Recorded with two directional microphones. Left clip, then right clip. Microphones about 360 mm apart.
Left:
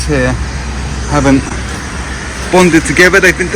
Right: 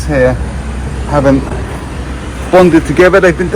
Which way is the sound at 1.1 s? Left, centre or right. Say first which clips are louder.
Right 1 dB; centre.